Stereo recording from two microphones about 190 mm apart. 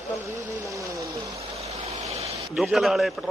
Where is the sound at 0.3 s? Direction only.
15° right (ahead or behind).